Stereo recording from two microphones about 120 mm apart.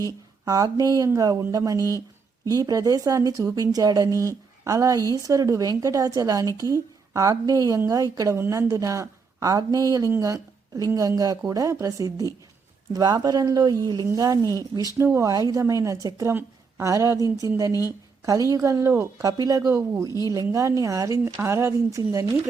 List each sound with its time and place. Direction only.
0.0 s a woman's voice: 30° right (ahead or behind)
17.7 s a woman's voice: 25° left (ahead or behind)
18.3 s speech: 25° right (ahead or behind)